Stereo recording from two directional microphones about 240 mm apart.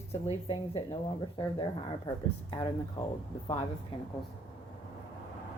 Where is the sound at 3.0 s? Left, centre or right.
Left.